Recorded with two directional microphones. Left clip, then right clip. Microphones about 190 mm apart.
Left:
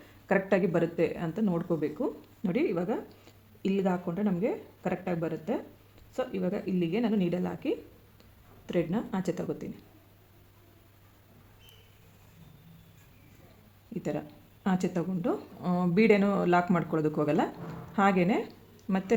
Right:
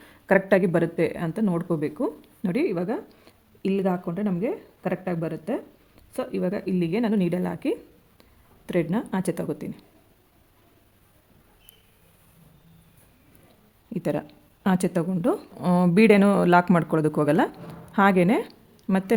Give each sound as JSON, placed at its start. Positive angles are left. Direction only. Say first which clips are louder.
{"t": 0.0, "sound": "speech", "louder": "right 7 dB", "side_deg": -55}
{"t": 13.9, "sound": "a woman's voice", "louder": "right 7 dB", "side_deg": -60}